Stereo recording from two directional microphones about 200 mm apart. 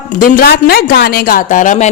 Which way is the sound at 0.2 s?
45° left (ahead or behind).